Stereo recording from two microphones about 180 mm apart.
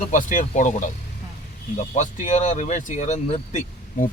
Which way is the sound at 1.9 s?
40° left (ahead or behind).